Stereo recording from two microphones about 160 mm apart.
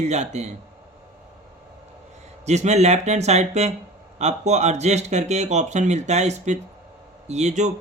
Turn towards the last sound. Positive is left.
turn(degrees=-45)  # may be behind; listen again after turning